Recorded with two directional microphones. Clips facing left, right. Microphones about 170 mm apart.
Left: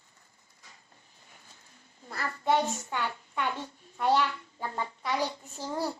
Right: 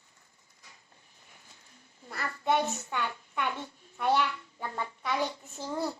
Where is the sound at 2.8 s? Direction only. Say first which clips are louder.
Left 1 dB; 20° left (ahead or behind).